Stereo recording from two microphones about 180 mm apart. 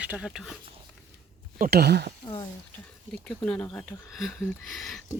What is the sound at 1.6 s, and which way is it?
Speech, 60° right (ahead or behind).